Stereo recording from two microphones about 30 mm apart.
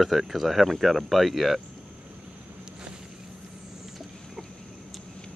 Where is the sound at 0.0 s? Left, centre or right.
Centre.